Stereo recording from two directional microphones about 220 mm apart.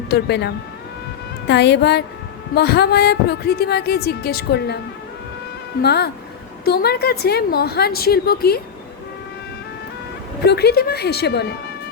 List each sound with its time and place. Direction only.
0.1 s speech: 50° left (ahead or behind)
5.8 s speech: 45° left (ahead or behind)
10.4 s speech: 50° left (ahead or behind)